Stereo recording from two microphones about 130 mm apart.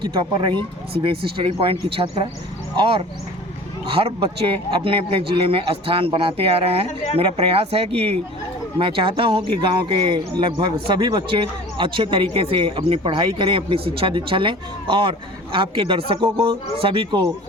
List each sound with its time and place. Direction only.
0.0 s speech: 35° right (ahead or behind)
6.8 s speech: 55° left (ahead or behind)
7.2 s speech: 50° right (ahead or behind)